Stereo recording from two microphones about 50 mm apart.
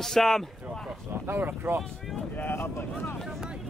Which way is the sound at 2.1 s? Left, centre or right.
Centre.